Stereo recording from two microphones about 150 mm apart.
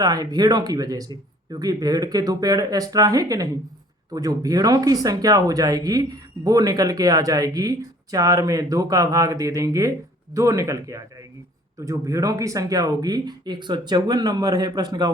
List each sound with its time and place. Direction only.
0.0 s speech: 25° right (ahead or behind)